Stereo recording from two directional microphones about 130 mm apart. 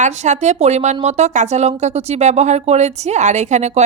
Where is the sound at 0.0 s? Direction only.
65° right (ahead or behind).